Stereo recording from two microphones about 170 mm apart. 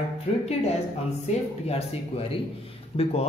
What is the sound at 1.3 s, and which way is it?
Speech, 40° left (ahead or behind).